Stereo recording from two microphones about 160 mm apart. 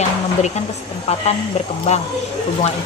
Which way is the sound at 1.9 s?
45° left (ahead or behind).